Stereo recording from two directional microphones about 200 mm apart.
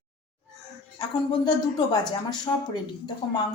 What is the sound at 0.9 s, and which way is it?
Speech, 20° left (ahead or behind).